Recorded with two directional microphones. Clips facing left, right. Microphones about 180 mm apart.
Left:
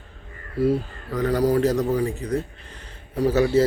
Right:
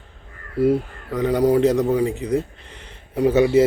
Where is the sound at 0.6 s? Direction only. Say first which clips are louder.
Right 3 dB; 25° right (ahead or behind).